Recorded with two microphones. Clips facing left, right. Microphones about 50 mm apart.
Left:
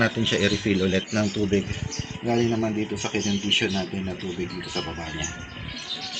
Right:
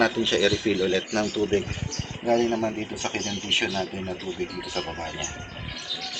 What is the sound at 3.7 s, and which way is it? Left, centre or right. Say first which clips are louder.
Speech: left 1 dB; centre.